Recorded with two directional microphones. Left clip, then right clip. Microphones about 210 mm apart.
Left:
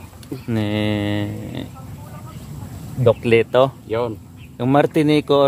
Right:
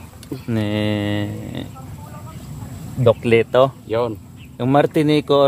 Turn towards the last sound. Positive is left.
turn(degrees=10)  # may be behind; listen again after turning